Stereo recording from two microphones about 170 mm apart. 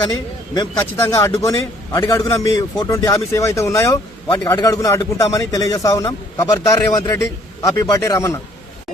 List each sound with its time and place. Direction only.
0.1 s speech: 25° left (ahead or behind)